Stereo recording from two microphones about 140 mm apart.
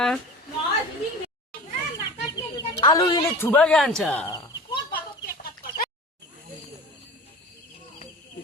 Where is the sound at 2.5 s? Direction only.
25° left (ahead or behind).